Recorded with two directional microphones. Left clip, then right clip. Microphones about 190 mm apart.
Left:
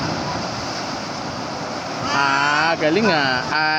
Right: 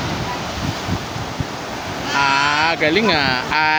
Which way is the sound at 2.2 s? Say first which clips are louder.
Right 2 dB; 20° right (ahead or behind).